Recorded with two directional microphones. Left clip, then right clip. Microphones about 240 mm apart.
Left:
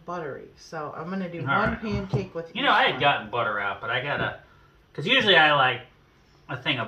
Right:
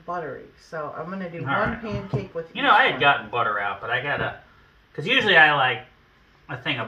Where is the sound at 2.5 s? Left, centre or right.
Centre.